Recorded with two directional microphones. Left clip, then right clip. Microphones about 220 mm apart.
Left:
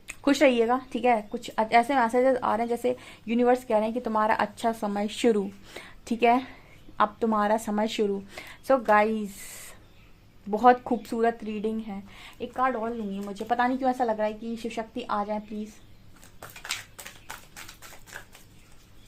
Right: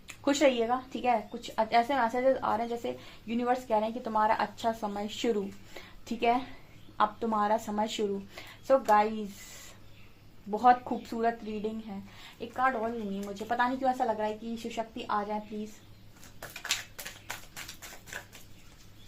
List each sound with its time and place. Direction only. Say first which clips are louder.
0.1 s speech: left 4 dB; 45° left (ahead or behind)